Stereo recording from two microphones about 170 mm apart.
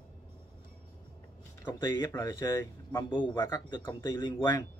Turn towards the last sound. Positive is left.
turn(degrees=15)  # may be behind; listen again after turning